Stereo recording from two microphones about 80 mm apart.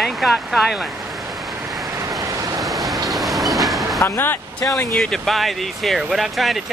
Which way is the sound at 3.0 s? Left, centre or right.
Centre.